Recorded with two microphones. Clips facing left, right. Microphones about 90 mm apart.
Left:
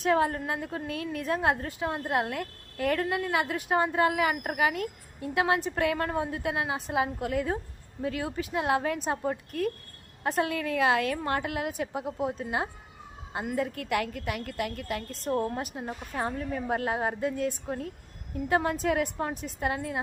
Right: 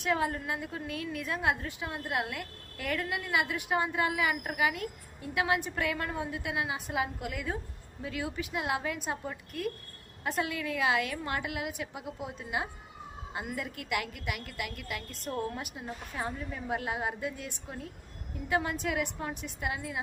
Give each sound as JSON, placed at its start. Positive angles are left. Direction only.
{"t": 0.0, "sound": "a woman's voice", "side_deg": 40}